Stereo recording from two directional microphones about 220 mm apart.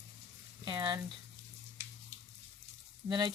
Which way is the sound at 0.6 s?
20° right (ahead or behind).